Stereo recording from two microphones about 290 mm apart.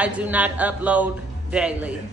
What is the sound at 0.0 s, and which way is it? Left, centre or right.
Speech, centre.